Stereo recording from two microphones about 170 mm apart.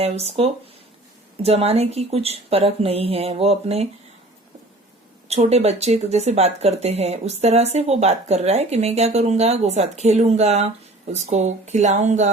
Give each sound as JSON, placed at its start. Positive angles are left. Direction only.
{"t": 0.0, "sound": "speech", "side_deg": -40}
{"t": 5.3, "sound": "speech", "side_deg": -40}